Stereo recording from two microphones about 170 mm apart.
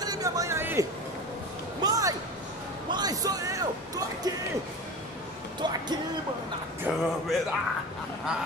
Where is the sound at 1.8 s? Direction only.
20° right (ahead or behind).